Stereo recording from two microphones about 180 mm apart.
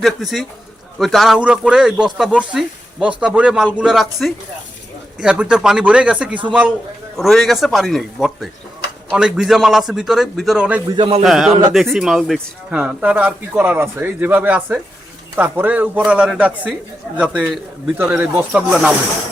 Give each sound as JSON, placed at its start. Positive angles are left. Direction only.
{"t": 0.0, "sound": "speech", "side_deg": 0}
{"t": 10.9, "sound": "a man's voice", "side_deg": -25}
{"t": 11.2, "sound": "speech", "side_deg": 0}
{"t": 17.9, "sound": "speech", "side_deg": -10}